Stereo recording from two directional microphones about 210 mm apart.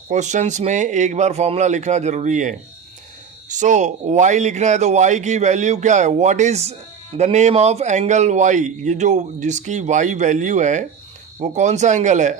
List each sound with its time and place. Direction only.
0.1 s a man's voice: 35° right (ahead or behind)